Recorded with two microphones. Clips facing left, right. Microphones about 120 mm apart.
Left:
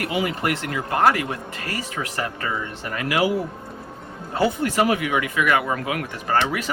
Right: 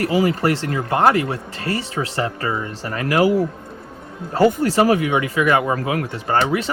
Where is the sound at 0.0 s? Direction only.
35° right (ahead or behind).